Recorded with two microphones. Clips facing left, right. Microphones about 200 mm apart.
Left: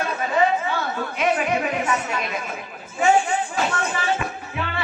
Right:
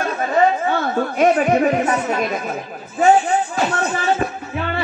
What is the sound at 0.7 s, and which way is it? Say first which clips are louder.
A woman's voice: right 7 dB; 45° right (ahead or behind).